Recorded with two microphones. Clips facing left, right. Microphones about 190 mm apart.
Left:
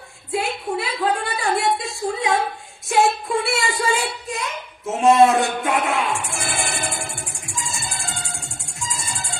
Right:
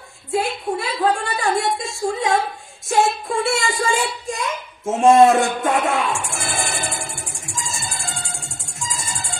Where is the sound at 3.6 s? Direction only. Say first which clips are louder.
Right 1 dB; 45° right (ahead or behind).